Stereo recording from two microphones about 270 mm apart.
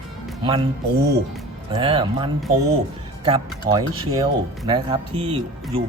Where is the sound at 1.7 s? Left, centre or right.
Centre.